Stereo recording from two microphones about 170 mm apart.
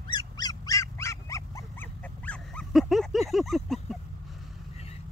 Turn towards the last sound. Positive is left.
turn(degrees=0)  # may be behind; listen again after turning